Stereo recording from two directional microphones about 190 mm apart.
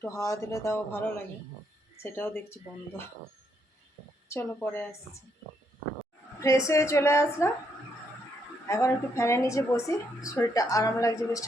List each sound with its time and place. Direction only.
0.0 s a woman's voice: 15° left (ahead or behind)
4.3 s a woman's voice: 10° left (ahead or behind)
6.4 s a woman's voice: 15° left (ahead or behind)
8.6 s a woman's voice: 15° left (ahead or behind)